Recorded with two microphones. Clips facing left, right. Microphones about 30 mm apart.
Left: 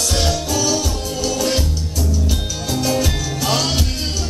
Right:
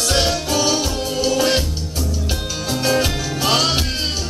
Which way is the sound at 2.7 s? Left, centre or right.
Centre.